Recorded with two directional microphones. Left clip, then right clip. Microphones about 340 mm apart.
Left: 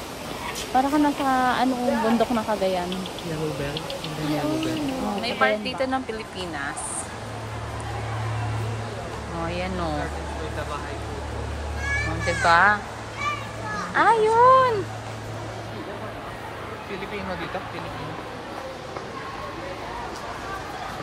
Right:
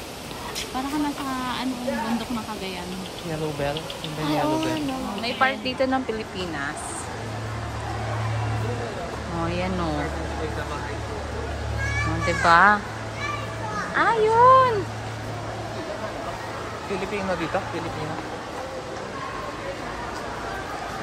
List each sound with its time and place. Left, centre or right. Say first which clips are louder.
0.7 s speech: left 8 dB; centre
4.3 s speech: right 3 dB; centre
12.3 s speech: right 1 dB; centre
13.9 s speech: left 1 dB; centre